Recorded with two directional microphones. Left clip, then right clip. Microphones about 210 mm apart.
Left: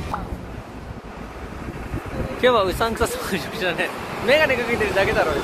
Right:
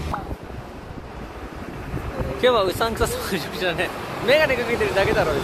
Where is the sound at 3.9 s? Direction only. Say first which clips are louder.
Even; 55° left (ahead or behind).